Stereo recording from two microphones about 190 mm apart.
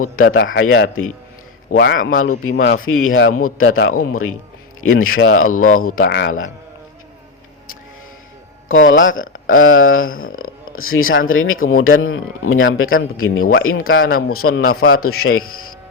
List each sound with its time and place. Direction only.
0.2 s a man's voice: 90° left
1.7 s speech: 60° left (ahead or behind)
2.0 s a man's voice: 90° left
5.7 s speech: 50° left (ahead or behind); by 6.5 s 85° left
8.9 s a man's voice: 90° left
10.2 s a sound: 45° left (ahead or behind)
10.8 s a man's voice: 90° left